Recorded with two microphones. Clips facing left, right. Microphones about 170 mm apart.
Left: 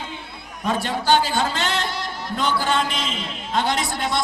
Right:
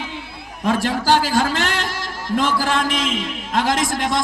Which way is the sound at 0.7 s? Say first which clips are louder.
Right 2 dB; 90° right.